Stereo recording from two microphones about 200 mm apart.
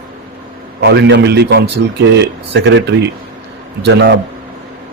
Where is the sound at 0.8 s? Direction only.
60° right (ahead or behind).